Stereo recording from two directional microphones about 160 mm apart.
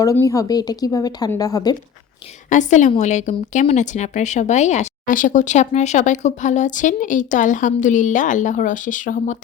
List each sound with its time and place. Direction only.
0.0 s speech: 20° left (ahead or behind)
2.5 s a woman's voice: 50° left (ahead or behind)